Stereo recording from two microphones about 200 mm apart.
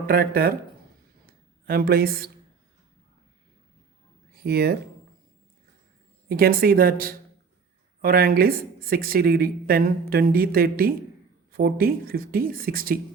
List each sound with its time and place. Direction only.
0.1 s speech: 50° right (ahead or behind)
1.6 s speech: 50° right (ahead or behind)
4.4 s speech: 55° right (ahead or behind)
6.2 s speech: 50° right (ahead or behind)